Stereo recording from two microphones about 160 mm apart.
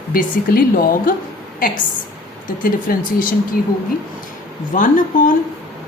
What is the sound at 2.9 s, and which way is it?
Speech, 65° left (ahead or behind).